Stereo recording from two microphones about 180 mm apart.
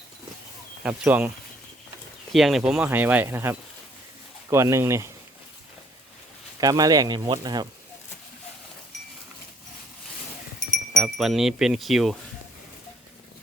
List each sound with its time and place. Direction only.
0.8 s speech: 5° right (ahead or behind)
2.3 s speech: centre (ahead or behind)
6.6 s speech: 20° right (ahead or behind)
11.0 s wind chime: centre (ahead or behind)